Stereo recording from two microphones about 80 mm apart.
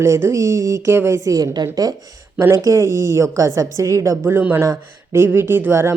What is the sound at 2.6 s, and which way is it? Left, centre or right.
A woman's voice, right.